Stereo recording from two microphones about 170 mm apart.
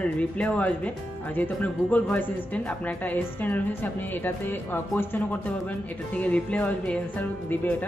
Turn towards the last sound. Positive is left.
turn(degrees=10)  # may be behind; listen again after turning